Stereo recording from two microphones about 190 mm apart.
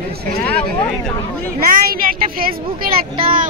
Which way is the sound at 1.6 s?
50° right (ahead or behind).